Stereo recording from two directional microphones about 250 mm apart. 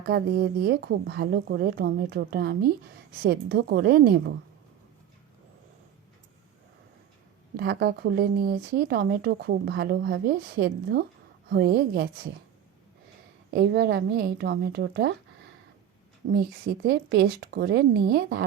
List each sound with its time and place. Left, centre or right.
0.1 s speech: right
7.5 s speech: right
13.5 s speech: right
16.3 s speech: right